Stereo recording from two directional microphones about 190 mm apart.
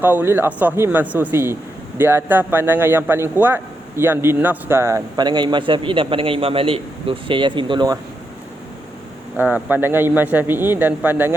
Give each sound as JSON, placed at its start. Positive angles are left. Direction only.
{"t": 0.0, "sound": "a man's voice", "side_deg": -10}
{"t": 9.4, "sound": "a man's voice", "side_deg": -10}